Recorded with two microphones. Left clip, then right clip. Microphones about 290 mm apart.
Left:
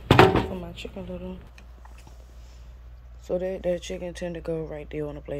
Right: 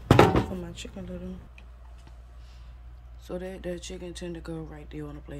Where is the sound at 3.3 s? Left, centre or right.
Centre.